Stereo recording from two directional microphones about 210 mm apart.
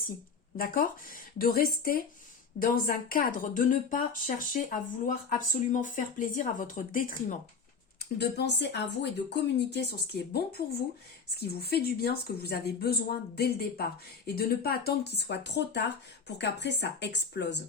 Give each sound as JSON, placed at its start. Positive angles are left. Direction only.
{"t": 0.5, "sound": "speech", "side_deg": 45}
{"t": 8.2, "sound": "speech", "side_deg": 55}